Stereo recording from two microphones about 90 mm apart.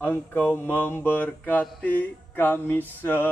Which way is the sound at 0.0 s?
25° left (ahead or behind).